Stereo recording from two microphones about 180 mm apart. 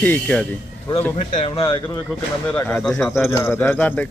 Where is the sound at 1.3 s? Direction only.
35° left (ahead or behind).